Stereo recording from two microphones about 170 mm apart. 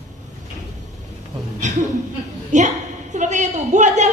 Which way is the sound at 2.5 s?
45° right (ahead or behind).